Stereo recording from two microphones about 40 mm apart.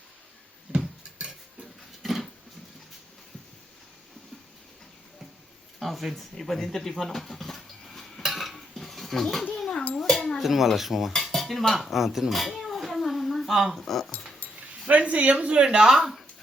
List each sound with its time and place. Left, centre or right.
0.7 s music: right
2.0 s a sound: centre
5.8 s speech: centre
7.3 s a sound: centre
8.2 s cutlery: centre
9.5 s a sound: centre
10.4 s speech: centre
11.1 s dishes: centre
11.8 s a sound: centre
13.5 s speech: centre
13.7 s speech: centre
14.8 s speech: right